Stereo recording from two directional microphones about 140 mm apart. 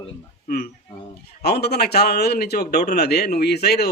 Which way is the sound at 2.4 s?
90° left.